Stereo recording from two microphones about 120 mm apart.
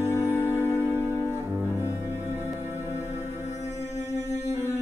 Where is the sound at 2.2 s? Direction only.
20° right (ahead or behind).